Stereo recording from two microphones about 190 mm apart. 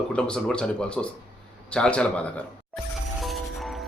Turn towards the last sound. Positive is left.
turn(degrees=0)  # may be behind; listen again after turning